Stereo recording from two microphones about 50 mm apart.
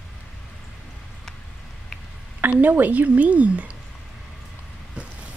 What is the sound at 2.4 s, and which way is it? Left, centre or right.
A woman's voice, right.